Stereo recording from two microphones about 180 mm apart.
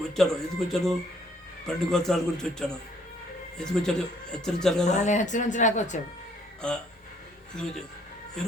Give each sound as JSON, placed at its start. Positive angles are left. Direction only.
{"t": 0.0, "sound": "speech", "side_deg": 0}
{"t": 4.9, "sound": "speech", "side_deg": 40}
{"t": 6.6, "sound": "speech", "side_deg": 5}